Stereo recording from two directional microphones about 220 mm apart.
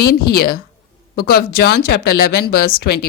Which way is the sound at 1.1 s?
45° left (ahead or behind).